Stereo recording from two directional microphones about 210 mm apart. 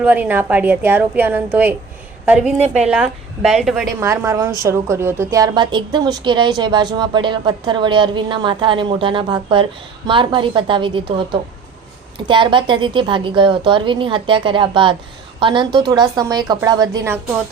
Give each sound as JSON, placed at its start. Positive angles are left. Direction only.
{"t": 0.0, "sound": "a woman's voice", "side_deg": -10}
{"t": 4.0, "sound": "a woman's voice", "side_deg": -15}